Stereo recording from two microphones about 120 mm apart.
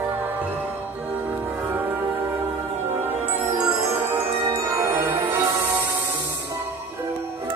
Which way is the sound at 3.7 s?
15° right (ahead or behind).